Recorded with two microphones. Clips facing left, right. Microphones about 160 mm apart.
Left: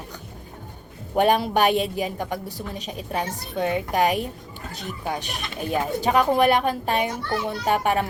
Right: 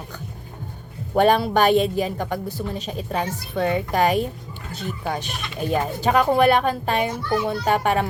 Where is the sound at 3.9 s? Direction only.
10° left (ahead or behind).